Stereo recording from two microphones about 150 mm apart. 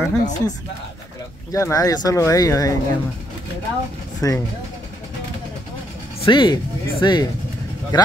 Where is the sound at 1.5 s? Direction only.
20° left (ahead or behind).